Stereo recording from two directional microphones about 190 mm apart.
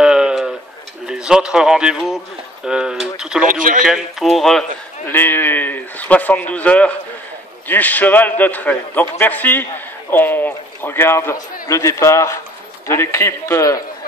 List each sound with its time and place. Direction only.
0.0 s tick-tock: 5° right (ahead or behind)
1.0 s speech: 5° right (ahead or behind)
3.4 s speech: 45° right (ahead or behind)
3.8 s a man's voice: centre (ahead or behind); by 13.8 s 15° left (ahead or behind)